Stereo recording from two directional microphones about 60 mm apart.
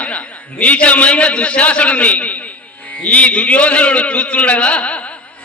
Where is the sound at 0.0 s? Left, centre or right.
Left.